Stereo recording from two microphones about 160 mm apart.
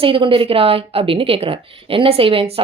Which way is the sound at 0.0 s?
35° right (ahead or behind).